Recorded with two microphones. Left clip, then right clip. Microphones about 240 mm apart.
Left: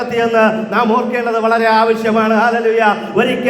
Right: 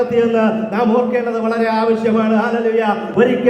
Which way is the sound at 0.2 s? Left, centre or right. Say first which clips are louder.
Left 6 dB; left.